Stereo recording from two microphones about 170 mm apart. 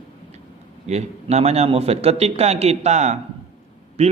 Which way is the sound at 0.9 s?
40° right (ahead or behind).